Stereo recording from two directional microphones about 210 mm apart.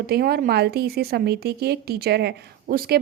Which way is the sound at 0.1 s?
45° right (ahead or behind).